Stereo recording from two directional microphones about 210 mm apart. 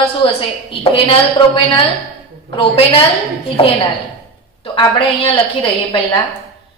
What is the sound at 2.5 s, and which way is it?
Speech, 25° left (ahead or behind).